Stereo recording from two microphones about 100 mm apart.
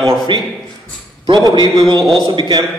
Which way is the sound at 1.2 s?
40° right (ahead or behind).